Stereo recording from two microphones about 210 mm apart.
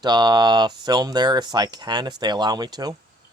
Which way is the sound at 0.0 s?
20° right (ahead or behind).